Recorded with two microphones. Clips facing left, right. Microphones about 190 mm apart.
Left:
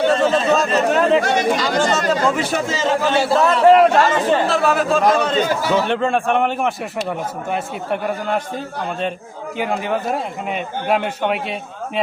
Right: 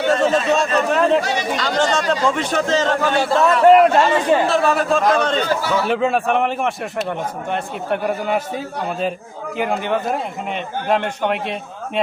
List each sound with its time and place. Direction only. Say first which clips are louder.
0.0 s a man's voice: left 1 dB; centre (ahead or behind)
1.2 s speech: left 4 dB; 50° left (ahead or behind)
1.5 s a man's voice: left 1 dB; 5° left (ahead or behind)
4.4 s a man's voice: even; centre (ahead or behind)
9.6 s a man's voice: right 1 dB; centre (ahead or behind)